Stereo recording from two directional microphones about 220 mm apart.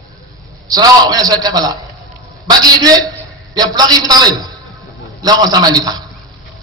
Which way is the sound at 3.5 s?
15° right (ahead or behind).